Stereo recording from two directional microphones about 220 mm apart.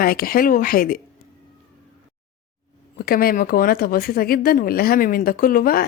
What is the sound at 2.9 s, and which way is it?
Speech, 45° left (ahead or behind).